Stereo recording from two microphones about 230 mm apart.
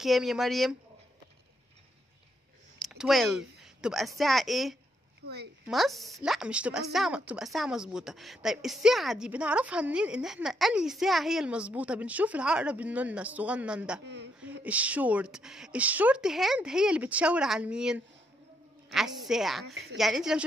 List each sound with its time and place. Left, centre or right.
0.0 s a woman's voice: centre
2.8 s a woman's voice: centre
5.2 s speech: right
5.7 s a woman's voice: centre
14.0 s a woman's voice: right
14.4 s a woman's voice: centre
19.6 s a woman's voice: right
20.0 s a woman's voice: centre